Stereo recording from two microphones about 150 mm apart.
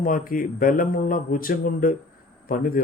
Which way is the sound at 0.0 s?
70° left (ahead or behind).